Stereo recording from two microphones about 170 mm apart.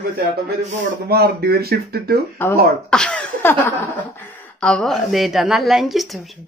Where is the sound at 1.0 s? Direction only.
65° right (ahead or behind).